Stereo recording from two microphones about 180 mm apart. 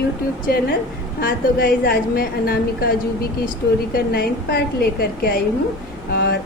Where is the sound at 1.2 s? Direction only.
60° left (ahead or behind).